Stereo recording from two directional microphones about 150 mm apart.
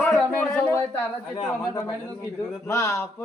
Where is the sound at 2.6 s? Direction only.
20° left (ahead or behind).